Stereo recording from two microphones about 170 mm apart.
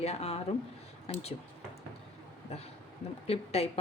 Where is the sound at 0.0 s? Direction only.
35° left (ahead or behind).